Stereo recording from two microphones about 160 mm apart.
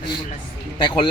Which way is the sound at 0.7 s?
30° left (ahead or behind).